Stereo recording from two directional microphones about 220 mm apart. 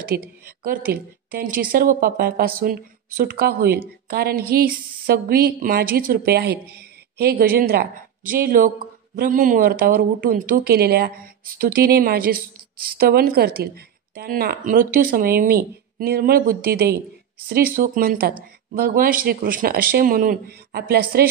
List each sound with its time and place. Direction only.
0.0 s a woman's voice: 40° right (ahead or behind)